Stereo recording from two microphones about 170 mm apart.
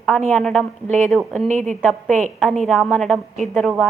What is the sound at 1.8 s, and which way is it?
A woman's voice, 5° left (ahead or behind).